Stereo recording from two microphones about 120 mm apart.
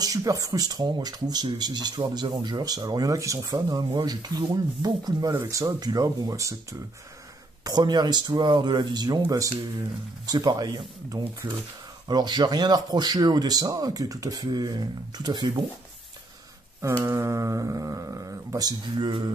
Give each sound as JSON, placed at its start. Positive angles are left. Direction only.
{"t": 0.0, "sound": "speech", "side_deg": -30}
{"t": 5.3, "sound": "speech", "side_deg": -25}
{"t": 17.0, "sound": "speech", "side_deg": -30}